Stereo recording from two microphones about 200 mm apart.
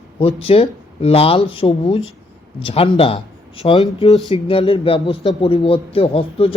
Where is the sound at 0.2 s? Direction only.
30° left (ahead or behind).